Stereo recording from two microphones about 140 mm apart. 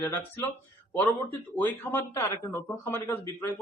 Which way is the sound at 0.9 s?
15° left (ahead or behind).